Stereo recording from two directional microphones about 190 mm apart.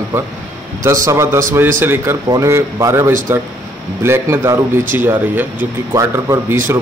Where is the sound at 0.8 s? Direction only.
15° right (ahead or behind).